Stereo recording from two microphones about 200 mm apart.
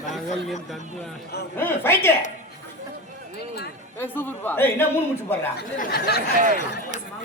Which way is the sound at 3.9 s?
10° left (ahead or behind).